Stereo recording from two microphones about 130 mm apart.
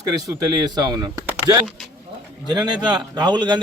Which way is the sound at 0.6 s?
30° right (ahead or behind).